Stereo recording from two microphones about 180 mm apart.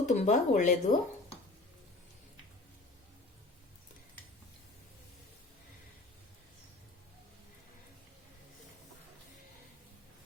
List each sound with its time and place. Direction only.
0.0 s speech: 40° left (ahead or behind)